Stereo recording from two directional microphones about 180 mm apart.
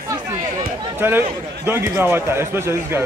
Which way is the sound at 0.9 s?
10° right (ahead or behind).